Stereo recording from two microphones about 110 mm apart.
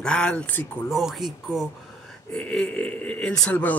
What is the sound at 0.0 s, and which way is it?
Speech, 10° left (ahead or behind).